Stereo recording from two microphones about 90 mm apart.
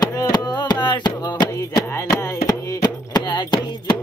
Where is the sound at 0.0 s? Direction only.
45° left (ahead or behind).